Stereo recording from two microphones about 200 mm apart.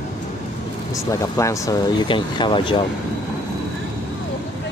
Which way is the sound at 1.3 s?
15° left (ahead or behind).